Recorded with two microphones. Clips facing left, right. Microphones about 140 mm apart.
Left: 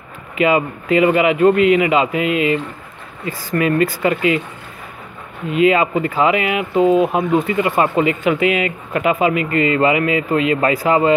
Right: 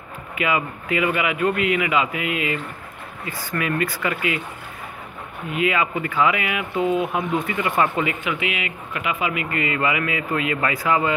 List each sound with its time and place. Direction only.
0.4 s speech: 30° left (ahead or behind)
5.5 s speech: 25° left (ahead or behind)
8.2 s speech: 40° left (ahead or behind)